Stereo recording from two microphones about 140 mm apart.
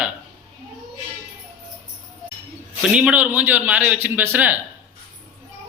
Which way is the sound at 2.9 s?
10° right (ahead or behind).